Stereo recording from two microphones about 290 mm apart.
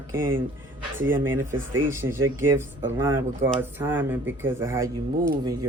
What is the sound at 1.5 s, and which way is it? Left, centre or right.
Speech, right.